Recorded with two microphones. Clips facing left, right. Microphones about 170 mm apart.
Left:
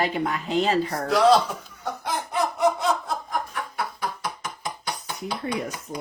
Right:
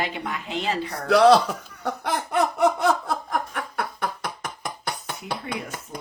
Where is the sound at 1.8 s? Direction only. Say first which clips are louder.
Right 2 dB; 65° right (ahead or behind).